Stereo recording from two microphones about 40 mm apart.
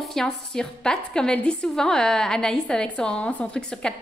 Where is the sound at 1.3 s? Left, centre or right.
Left.